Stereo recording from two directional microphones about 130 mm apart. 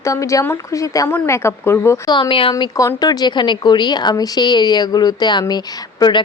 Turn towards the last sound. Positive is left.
turn(degrees=30)  # may be behind; listen again after turning